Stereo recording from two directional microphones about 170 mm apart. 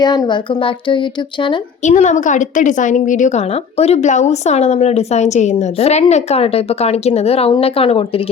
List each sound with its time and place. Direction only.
0.0 s speech: 25° left (ahead or behind)
1.8 s a woman's voice: 45° left (ahead or behind)